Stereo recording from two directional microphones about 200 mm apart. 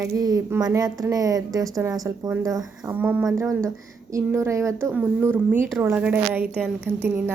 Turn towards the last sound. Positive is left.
turn(degrees=-10)  # may be behind; listen again after turning